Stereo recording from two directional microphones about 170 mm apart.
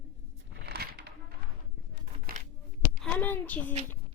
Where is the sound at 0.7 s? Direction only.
70° right (ahead or behind).